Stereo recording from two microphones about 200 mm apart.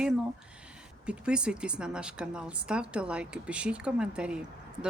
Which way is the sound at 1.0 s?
5° right (ahead or behind).